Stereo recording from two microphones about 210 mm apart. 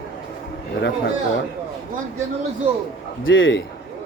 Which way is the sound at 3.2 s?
65° left (ahead or behind).